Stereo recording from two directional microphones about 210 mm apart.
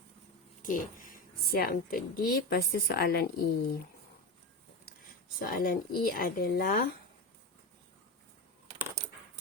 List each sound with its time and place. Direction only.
0.6 s a woman's voice: 40° left (ahead or behind)
5.4 s a woman's voice: 45° left (ahead or behind)